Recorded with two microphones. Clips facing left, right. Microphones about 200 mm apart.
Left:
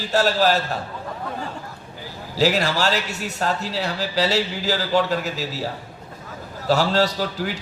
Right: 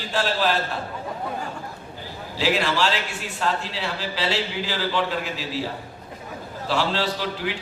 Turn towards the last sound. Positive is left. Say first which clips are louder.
# left 3 dB
turn(degrees=40)  # may be behind; listen again after turning